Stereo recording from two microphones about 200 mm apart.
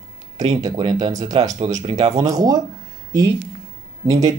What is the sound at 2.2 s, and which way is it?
Speech, 15° right (ahead or behind).